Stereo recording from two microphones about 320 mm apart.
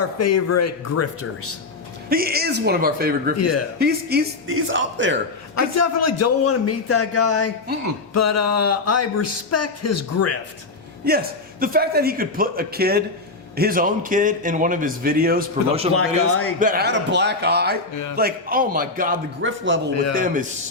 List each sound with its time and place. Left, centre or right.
0.0 s speech: left
2.0 s a man's voice: right
5.5 s speech: left
11.6 s a man's voice: right
15.9 s speech: left
16.6 s a man's voice: right
19.9 s a man's voice: left
20.1 s a man's voice: right